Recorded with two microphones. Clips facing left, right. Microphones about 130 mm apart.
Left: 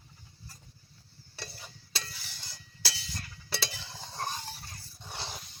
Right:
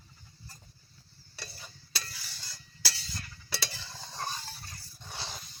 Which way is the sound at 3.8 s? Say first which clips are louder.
Left 2 dB; 15° left (ahead or behind).